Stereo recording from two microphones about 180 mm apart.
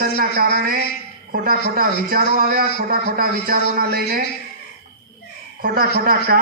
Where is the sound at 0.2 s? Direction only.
55° right (ahead or behind).